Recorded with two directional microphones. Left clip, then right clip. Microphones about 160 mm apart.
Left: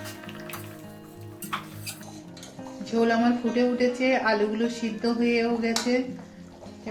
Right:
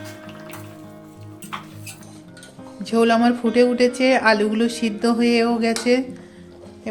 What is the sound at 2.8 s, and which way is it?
Speech, 90° right.